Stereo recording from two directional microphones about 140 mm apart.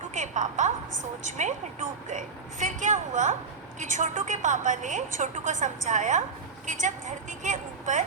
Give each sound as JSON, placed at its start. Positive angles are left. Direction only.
{"t": 0.1, "sound": "a woman's voice", "side_deg": -60}